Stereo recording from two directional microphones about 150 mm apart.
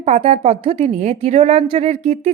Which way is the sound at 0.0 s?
50° right (ahead or behind).